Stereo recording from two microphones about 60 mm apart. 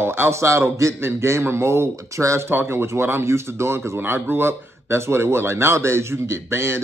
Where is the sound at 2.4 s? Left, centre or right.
Right.